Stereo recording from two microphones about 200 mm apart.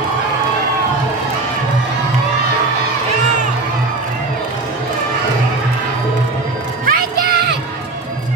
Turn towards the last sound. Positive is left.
turn(degrees=-50)  # may be behind; listen again after turning